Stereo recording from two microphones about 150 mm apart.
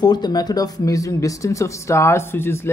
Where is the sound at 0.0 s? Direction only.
30° left (ahead or behind).